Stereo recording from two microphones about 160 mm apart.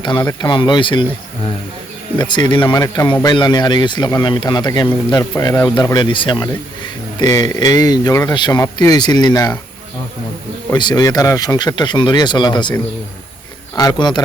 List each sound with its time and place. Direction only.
0.0 s a man's voice: 30° left (ahead or behind)
2.1 s a man's voice: 30° left (ahead or behind)
2.8 s a man's voice: 20° left (ahead or behind)
10.7 s a man's voice: 25° left (ahead or behind)
13.7 s a man's voice: 25° left (ahead or behind)